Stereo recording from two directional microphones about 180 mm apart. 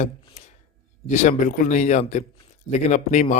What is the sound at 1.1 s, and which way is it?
A man's voice, 45° left (ahead or behind).